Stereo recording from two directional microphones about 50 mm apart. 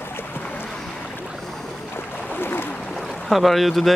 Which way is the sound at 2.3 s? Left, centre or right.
Left.